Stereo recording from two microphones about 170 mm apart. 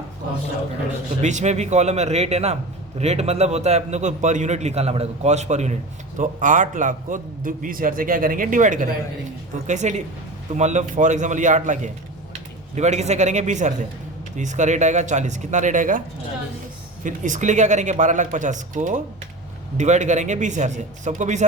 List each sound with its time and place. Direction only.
1.2 s a man's voice: 45° right (ahead or behind)